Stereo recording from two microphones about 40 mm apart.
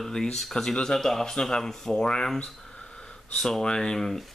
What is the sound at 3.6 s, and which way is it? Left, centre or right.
Speech, centre.